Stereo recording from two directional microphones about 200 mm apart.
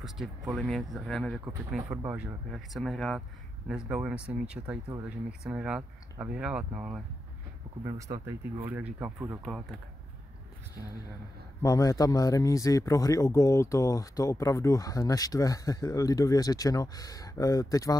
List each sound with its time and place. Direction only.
0.6 s speech: centre (ahead or behind)
1.9 s speech: 10° right (ahead or behind)
7.8 s speech: 20° right (ahead or behind); by 9.8 s centre (ahead or behind)
11.6 s speech: 20° left (ahead or behind)